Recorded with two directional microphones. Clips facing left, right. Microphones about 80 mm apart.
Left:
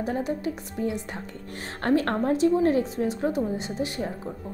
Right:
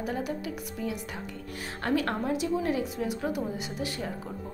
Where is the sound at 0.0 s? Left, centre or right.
Left.